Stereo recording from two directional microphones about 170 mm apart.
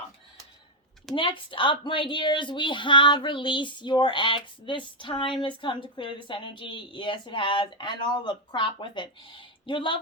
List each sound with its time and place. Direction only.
1.1 s speech: 30° left (ahead or behind)